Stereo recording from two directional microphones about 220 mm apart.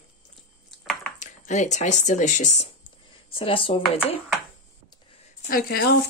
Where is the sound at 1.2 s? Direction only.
30° left (ahead or behind).